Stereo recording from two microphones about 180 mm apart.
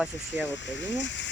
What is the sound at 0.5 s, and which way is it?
Speech, 90° left.